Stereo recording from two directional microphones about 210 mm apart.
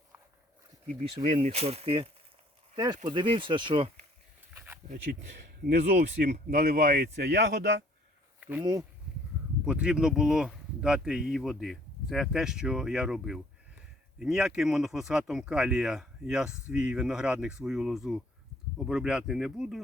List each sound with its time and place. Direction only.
1.1 s speech: 30° right (ahead or behind)
4.5 s a sound: 10° right (ahead or behind)
5.2 s speech: 55° right (ahead or behind)
8.4 s insect: 10° right (ahead or behind)
9.6 s speech: 5° right (ahead or behind)